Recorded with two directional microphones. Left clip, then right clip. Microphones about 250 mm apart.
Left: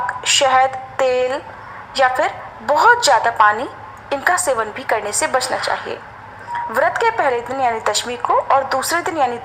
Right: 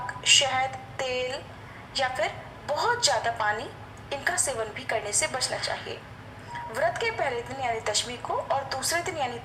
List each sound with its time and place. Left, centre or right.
0.3 s a woman's voice: left